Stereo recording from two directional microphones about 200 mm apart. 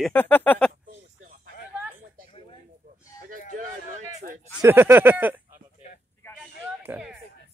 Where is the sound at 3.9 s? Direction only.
35° right (ahead or behind).